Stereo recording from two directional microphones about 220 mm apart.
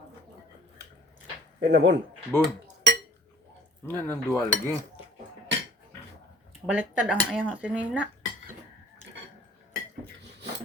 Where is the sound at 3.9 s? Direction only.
10° left (ahead or behind).